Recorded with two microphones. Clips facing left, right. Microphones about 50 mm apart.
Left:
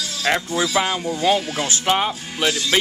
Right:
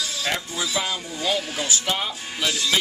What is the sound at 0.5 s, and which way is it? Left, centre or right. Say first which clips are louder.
Speech: left 6 dB; left.